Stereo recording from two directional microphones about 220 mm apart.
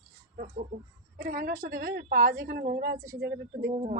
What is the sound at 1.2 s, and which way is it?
A woman's voice, 40° right (ahead or behind).